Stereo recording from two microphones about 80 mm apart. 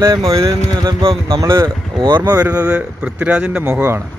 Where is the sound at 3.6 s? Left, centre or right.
Right.